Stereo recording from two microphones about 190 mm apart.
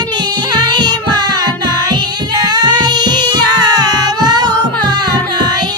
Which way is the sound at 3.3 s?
20° right (ahead or behind).